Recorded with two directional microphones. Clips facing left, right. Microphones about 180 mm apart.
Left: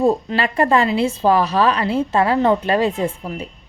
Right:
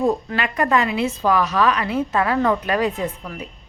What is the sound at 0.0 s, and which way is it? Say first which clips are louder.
A woman's voice: left 3 dB; 30° left (ahead or behind).